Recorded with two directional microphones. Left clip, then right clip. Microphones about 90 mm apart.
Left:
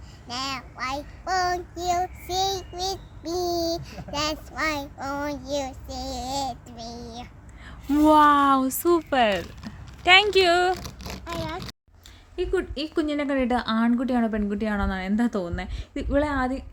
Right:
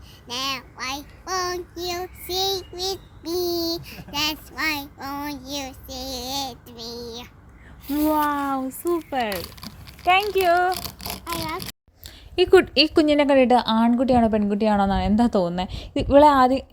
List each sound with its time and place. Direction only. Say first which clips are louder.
0.3 s child singing: right 3 dB; 40° left (ahead or behind)
7.9 s speech: left 3 dB; 35° left (ahead or behind)
8.1 s speech: left 8 dB; 60° left (ahead or behind)
10.2 s speech: even; 90° left
10.8 s a sound: right 5 dB; 60° right (ahead or behind)
13.3 s a woman's voice: right 8 dB; 90° right
13.6 s a woman's voice: right 5 dB; 50° right (ahead or behind); by 16.6 s 90° right